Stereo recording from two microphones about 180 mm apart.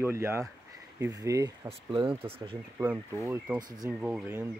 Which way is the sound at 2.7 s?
15° right (ahead or behind).